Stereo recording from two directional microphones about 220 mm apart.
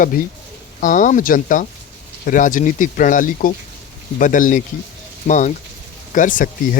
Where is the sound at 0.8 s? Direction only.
35° left (ahead or behind).